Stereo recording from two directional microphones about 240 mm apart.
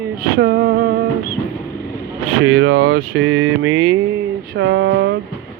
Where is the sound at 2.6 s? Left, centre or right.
Right.